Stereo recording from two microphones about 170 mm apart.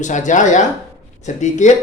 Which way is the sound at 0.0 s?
45° left (ahead or behind).